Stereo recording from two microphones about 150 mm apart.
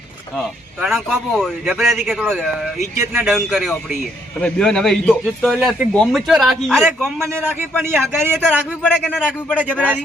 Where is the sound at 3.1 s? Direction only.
10° right (ahead or behind).